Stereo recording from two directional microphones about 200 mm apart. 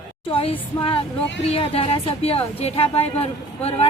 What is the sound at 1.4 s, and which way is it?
A woman's voice, 30° left (ahead or behind).